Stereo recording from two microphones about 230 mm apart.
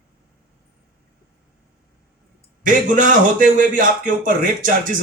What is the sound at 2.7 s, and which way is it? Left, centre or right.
A man's voice, right.